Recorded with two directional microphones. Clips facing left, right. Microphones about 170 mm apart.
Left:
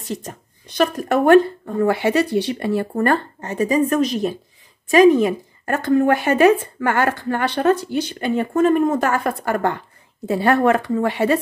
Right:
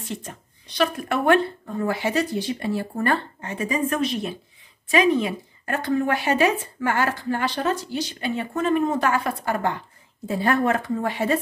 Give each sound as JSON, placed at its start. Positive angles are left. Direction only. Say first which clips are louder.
{"t": 0.0, "sound": "speech", "louder": "left 5 dB", "side_deg": 40}
{"t": 1.8, "sound": "speech", "louder": "left 6 dB", "side_deg": 65}
{"t": 10.2, "sound": "speech", "louder": "left 5 dB", "side_deg": 70}